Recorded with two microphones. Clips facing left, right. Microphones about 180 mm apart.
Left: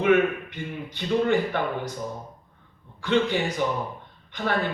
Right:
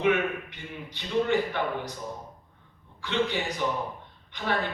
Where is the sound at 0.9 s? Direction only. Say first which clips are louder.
Left 3 dB; 50° left (ahead or behind).